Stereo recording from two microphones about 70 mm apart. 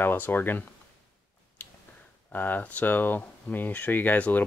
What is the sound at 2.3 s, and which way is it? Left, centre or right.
Speech, left.